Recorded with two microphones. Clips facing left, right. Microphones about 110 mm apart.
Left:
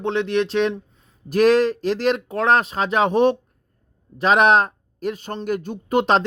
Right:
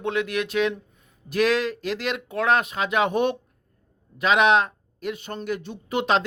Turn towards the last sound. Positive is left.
turn(degrees=40)  # may be behind; listen again after turning